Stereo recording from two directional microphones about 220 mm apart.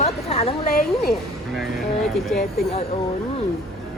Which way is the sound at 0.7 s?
40° left (ahead or behind).